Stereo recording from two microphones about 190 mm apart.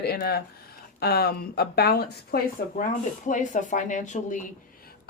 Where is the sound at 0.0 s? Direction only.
55° left (ahead or behind).